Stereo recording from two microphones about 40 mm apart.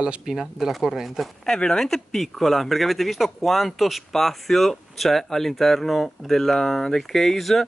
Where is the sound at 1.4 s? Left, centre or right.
Centre.